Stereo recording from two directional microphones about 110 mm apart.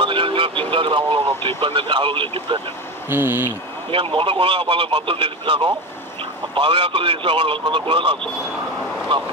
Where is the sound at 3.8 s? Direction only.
55° right (ahead or behind).